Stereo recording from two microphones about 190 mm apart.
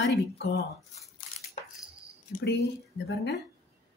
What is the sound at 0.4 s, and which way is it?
Speech, 65° left (ahead or behind).